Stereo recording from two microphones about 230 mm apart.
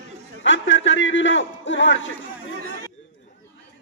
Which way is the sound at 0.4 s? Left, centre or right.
Left.